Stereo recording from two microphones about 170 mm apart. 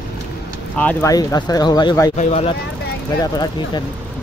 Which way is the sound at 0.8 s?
10° left (ahead or behind).